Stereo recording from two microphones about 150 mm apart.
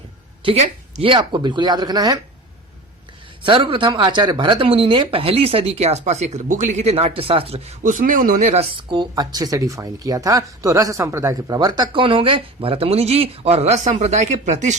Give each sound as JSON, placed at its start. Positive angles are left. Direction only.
{"t": 0.4, "sound": "speech", "side_deg": -45}
{"t": 1.1, "sound": "speech", "side_deg": -30}
{"t": 3.4, "sound": "speech", "side_deg": -35}
{"t": 7.8, "sound": "speech", "side_deg": -60}
{"t": 8.7, "sound": "speech", "side_deg": -30}